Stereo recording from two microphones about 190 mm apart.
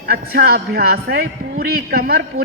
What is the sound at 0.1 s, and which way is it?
A man's voice, 55° right (ahead or behind).